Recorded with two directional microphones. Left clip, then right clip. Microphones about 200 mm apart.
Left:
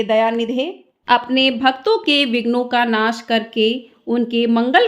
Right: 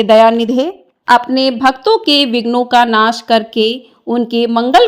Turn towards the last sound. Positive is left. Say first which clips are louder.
# right 5 dB
turn(degrees=-25)  # may be behind; listen again after turning